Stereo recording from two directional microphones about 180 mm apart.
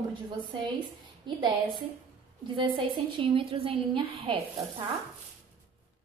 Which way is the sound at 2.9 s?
30° right (ahead or behind).